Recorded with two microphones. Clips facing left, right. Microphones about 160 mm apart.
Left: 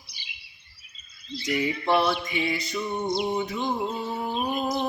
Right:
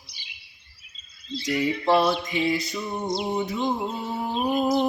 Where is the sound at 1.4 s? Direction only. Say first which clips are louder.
Right 2 dB; 35° right (ahead or behind).